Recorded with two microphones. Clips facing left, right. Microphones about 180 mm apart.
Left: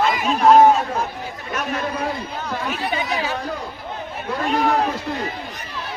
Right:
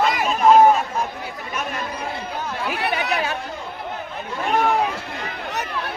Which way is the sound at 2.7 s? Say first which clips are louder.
Right 2 dB; 70° right (ahead or behind).